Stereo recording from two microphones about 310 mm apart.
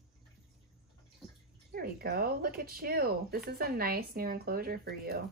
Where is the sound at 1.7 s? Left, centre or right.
Right.